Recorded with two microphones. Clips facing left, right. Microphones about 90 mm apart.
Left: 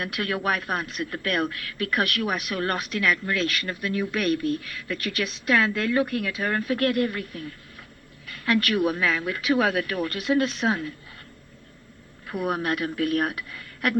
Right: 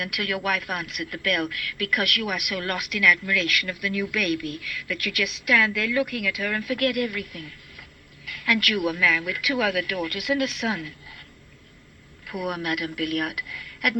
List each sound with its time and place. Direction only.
0.0 s speech: 35° left (ahead or behind)
12.3 s speech: 30° left (ahead or behind)